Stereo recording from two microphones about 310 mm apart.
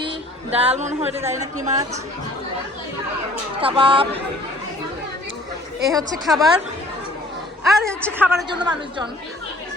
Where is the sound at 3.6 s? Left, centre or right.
Centre.